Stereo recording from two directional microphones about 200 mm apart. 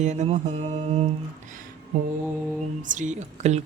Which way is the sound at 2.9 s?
40° right (ahead or behind).